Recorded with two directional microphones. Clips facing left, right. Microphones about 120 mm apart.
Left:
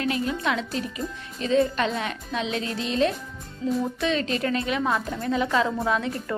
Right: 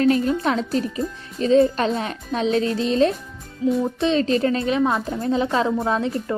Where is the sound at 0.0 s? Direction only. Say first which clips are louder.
Right 7 dB; 40° right (ahead or behind).